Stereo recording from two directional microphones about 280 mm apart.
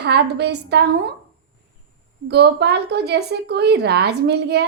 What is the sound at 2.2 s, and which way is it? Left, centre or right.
A woman's voice, right.